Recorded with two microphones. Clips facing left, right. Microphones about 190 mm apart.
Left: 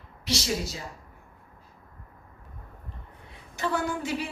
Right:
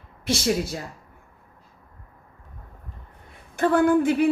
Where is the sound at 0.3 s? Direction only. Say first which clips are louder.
Right 6 dB; 55° right (ahead or behind).